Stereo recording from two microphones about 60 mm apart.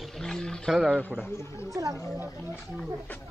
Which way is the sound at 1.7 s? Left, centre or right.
Right.